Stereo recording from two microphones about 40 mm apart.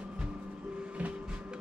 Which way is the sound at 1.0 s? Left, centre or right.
Right.